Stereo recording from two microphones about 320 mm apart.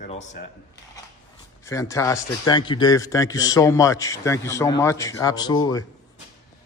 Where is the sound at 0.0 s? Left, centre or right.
Left.